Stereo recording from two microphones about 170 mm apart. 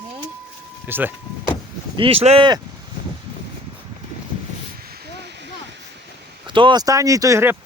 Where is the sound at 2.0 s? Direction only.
35° right (ahead or behind).